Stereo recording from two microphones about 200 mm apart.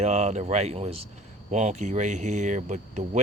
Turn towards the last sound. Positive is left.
turn(degrees=-35)  # may be behind; listen again after turning